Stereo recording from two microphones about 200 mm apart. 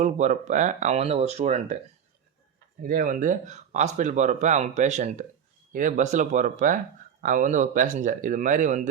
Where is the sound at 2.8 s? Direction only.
45° right (ahead or behind).